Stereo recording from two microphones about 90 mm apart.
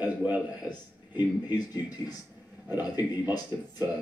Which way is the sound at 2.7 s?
25° right (ahead or behind).